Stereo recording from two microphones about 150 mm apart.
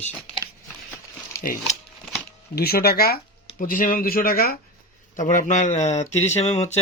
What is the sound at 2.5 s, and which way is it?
Speech, 90° left.